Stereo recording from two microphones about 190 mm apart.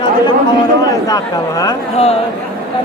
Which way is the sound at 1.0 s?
20° left (ahead or behind).